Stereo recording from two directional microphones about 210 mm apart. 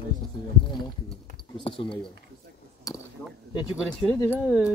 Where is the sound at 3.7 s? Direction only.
5° right (ahead or behind).